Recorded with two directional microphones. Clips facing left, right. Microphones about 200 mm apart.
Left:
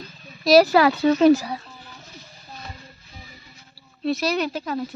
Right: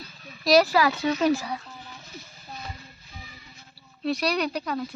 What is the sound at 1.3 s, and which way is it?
Speech, 40° left (ahead or behind).